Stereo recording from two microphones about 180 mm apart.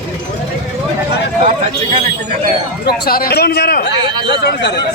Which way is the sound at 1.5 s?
35° right (ahead or behind).